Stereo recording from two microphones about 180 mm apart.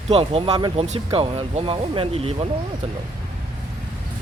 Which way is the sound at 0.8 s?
35° right (ahead or behind).